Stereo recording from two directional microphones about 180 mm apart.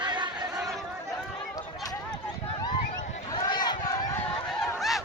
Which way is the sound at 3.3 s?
25° left (ahead or behind).